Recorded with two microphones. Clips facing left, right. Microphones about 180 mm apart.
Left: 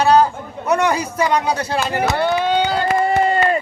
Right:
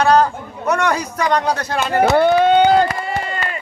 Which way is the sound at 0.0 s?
5° left (ahead or behind).